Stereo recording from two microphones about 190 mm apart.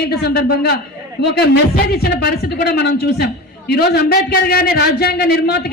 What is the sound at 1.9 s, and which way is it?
A man's voice, 55° left (ahead or behind).